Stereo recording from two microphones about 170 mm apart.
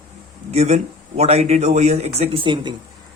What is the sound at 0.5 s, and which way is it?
Speech, 40° right (ahead or behind).